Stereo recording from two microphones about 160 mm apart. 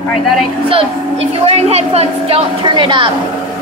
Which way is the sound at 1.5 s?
40° right (ahead or behind).